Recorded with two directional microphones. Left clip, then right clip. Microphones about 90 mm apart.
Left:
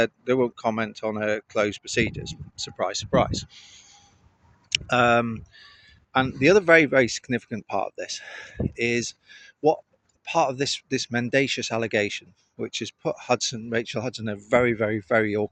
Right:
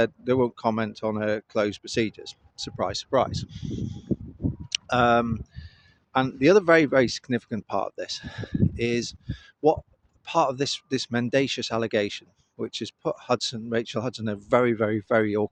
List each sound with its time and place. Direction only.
0.0 s speech: 30° right (ahead or behind)
6.1 s speech: 40° right (ahead or behind)